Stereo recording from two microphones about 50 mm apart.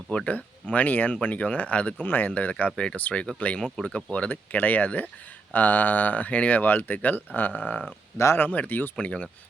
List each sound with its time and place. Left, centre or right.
0.3 s speech: left
2.0 s speech: left
9.0 s speech: left